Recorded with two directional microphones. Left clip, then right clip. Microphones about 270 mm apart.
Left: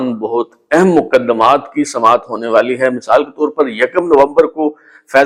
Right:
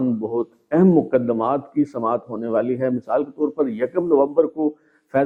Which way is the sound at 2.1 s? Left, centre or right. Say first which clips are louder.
Left 10 dB; centre.